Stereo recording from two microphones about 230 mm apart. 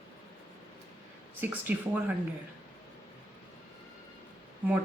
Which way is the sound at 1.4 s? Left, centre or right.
Centre.